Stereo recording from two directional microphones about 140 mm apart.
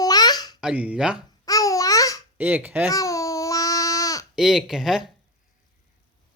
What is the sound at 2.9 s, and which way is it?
Babbling, 25° left (ahead or behind).